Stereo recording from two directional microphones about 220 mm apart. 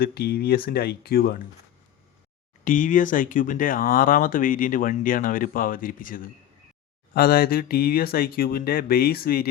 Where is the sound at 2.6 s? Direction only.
35° left (ahead or behind).